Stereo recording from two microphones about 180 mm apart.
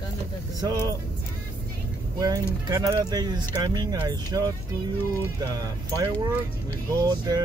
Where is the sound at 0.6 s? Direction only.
20° right (ahead or behind).